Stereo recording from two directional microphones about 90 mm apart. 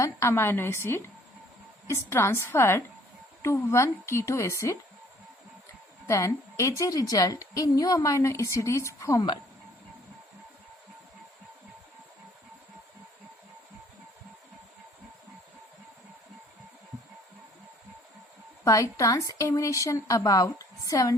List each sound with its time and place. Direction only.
0.0 s a woman's voice: 30° left (ahead or behind)
6.1 s a woman's voice: 35° left (ahead or behind)
18.6 s a woman's voice: 40° left (ahead or behind)